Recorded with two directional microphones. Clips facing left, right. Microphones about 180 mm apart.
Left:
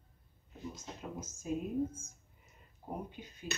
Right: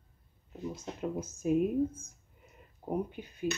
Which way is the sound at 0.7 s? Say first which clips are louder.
Right 8 dB; 60° right (ahead or behind).